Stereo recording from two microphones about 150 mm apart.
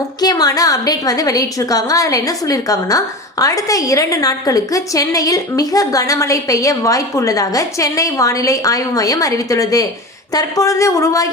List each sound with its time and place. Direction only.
0.2 s a woman's voice: 25° left (ahead or behind)